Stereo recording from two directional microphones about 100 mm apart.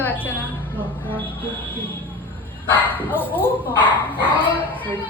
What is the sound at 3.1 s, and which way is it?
Speech, 20° left (ahead or behind).